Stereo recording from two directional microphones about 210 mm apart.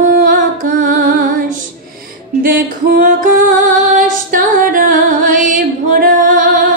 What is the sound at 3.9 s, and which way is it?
Female singing, 40° right (ahead or behind).